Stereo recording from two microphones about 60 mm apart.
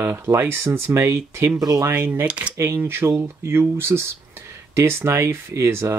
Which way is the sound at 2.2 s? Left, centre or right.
Centre.